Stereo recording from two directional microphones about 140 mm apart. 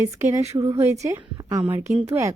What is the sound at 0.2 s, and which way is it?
A woman's voice, 20° right (ahead or behind).